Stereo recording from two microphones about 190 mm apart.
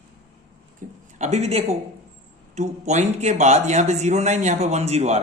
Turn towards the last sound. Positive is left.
turn(degrees=-35)  # may be behind; listen again after turning